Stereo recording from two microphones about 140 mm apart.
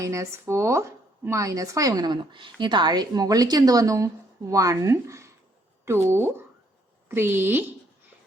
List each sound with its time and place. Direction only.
0.0 s speech: 20° right (ahead or behind)